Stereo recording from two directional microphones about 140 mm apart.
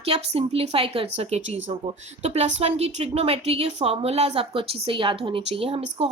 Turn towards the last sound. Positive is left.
turn(degrees=-45)  # may be behind; listen again after turning